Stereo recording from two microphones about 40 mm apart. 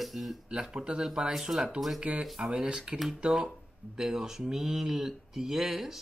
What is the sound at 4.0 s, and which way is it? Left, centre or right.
Speech, centre.